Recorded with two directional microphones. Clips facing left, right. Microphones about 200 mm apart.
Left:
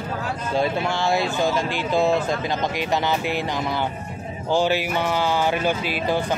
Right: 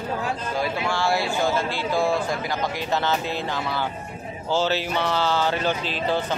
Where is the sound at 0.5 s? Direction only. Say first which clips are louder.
Left 5 dB; 20° left (ahead or behind).